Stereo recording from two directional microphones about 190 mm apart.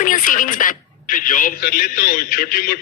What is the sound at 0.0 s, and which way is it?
A man's voice, 45° left (ahead or behind).